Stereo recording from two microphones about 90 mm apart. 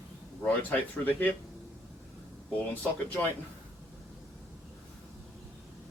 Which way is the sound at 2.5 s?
15° left (ahead or behind).